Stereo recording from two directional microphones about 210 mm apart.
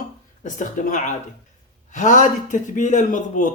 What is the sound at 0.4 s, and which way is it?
A man's voice, 35° left (ahead or behind).